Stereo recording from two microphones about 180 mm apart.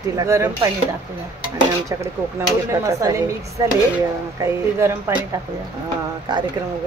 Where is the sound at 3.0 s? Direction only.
20° right (ahead or behind).